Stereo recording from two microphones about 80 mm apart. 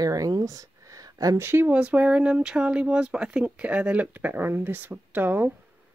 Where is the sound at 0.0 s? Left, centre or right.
Right.